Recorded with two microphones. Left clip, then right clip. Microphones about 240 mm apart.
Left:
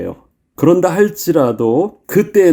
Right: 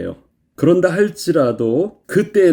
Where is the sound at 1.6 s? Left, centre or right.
Left.